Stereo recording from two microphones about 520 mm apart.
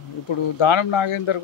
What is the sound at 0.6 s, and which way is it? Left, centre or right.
Speech, left.